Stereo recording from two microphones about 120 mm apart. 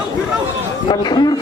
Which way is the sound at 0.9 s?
35° left (ahead or behind).